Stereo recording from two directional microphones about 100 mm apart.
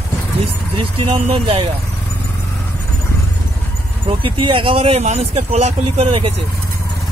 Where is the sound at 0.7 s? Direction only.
75° right (ahead or behind).